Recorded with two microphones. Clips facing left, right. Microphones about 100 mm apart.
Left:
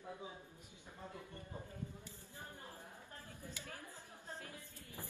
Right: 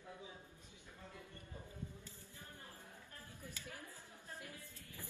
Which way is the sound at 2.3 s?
20° left (ahead or behind).